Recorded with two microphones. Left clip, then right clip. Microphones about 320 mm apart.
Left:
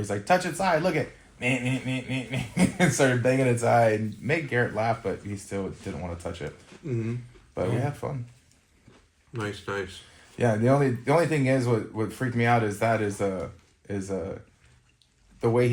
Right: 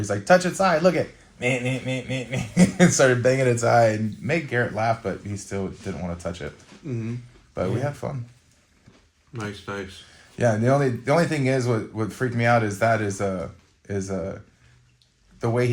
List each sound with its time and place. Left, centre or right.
0.0 s speech: right
7.5 s speech: right
9.3 s speech: centre
10.3 s speech: right
15.4 s speech: right